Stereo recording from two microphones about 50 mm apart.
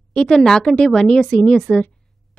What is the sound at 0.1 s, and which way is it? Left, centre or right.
Speech, centre.